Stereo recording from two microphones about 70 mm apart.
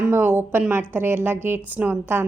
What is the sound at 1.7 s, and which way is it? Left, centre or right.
Speech, centre.